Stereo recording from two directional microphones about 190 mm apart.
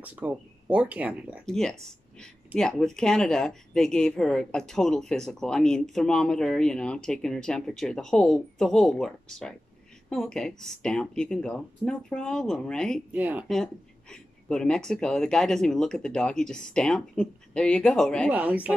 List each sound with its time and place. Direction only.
0.0 s speech: 10° right (ahead or behind)
1.4 s speech: 5° left (ahead or behind)
13.1 s speech: 10° right (ahead or behind)
13.6 s speech: 5° left (ahead or behind)
18.3 s speech: 10° right (ahead or behind)